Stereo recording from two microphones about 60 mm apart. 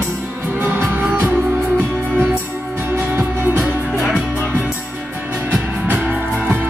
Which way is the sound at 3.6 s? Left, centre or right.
Centre.